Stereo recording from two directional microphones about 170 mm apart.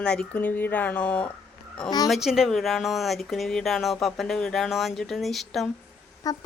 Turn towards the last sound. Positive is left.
turn(degrees=20)  # may be behind; listen again after turning